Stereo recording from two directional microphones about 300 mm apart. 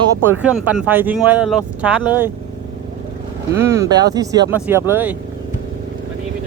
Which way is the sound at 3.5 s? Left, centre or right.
Centre.